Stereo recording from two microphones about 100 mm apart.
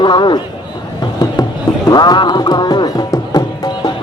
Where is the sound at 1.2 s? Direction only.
40° left (ahead or behind).